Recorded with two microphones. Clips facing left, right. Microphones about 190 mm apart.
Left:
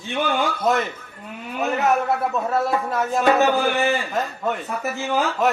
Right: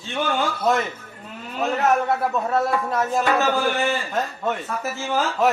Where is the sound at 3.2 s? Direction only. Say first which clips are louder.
Left 6 dB; 15° left (ahead or behind).